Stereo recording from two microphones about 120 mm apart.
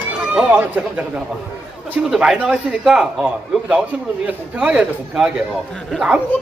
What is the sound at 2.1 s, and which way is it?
Speech, 5° right (ahead or behind).